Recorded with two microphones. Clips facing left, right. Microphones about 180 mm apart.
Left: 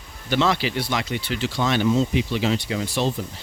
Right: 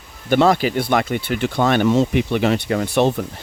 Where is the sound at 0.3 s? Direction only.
50° right (ahead or behind).